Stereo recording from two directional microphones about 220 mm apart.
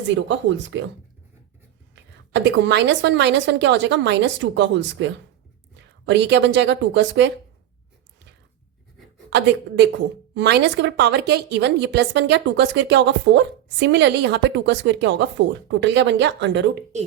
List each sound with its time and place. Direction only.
0.1 s speech: 55° right (ahead or behind)
2.3 s a woman's voice: 55° right (ahead or behind)
9.3 s speech: 50° right (ahead or behind)